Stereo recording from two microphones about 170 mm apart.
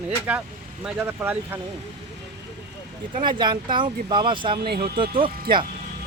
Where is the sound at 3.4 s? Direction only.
25° right (ahead or behind).